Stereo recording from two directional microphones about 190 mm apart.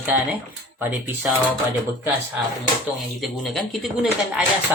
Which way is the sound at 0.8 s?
10° right (ahead or behind).